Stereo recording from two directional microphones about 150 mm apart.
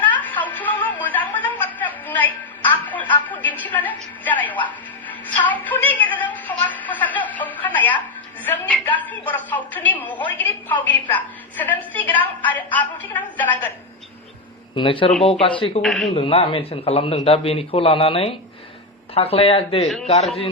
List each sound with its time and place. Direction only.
0.2 s television: 10° left (ahead or behind)
5.2 s a sound: 10° left (ahead or behind)
8.4 s a woman's voice: 10° left (ahead or behind)
14.8 s a man's voice: 35° left (ahead or behind)
15.8 s a man's voice: centre (ahead or behind)
16.1 s a man's voice: 40° left (ahead or behind)